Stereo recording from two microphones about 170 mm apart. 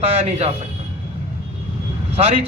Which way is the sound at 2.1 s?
35° right (ahead or behind).